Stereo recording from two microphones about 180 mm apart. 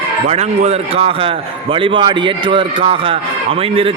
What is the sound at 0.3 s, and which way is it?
A man's voice, 35° right (ahead or behind).